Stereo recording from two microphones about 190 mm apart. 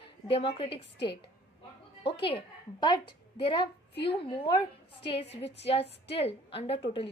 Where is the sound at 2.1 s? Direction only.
25° left (ahead or behind).